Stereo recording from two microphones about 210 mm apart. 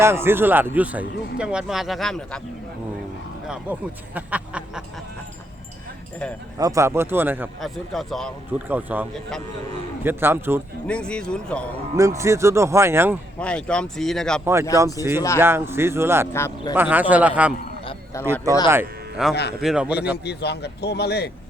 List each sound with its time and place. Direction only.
0.0 s a man's voice: 10° right (ahead or behind)
3.4 s speech: 5° right (ahead or behind)
6.6 s a man's voice: 15° right (ahead or behind)
7.6 s a man's voice: centre (ahead or behind)
10.8 s speech: 5° left (ahead or behind)
11.9 s a man's voice: 15° right (ahead or behind)
13.4 s speech: 5° left (ahead or behind)
14.4 s a man's voice: 10° right (ahead or behind)
16.3 s speech: 10° left (ahead or behind)
16.7 s a man's voice: 10° right (ahead or behind)
18.7 s speech: 5° right (ahead or behind)
19.3 s speech: 50° left (ahead or behind)
19.6 s speech: 5° right (ahead or behind)
20.2 s speech: 50° left (ahead or behind)